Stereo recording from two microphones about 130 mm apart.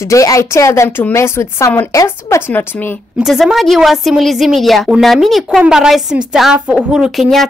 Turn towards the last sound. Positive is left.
turn(degrees=0)  # may be behind; listen again after turning